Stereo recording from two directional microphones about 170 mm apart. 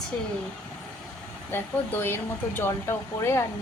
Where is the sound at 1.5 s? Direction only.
15° left (ahead or behind).